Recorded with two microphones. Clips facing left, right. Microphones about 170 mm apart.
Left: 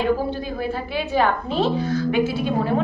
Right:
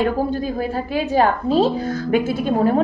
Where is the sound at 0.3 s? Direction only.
40° right (ahead or behind).